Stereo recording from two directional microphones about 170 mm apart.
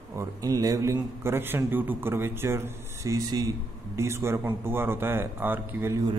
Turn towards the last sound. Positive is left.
turn(degrees=-15)  # may be behind; listen again after turning